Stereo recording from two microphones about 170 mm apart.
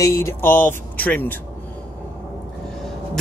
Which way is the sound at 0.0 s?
15° left (ahead or behind).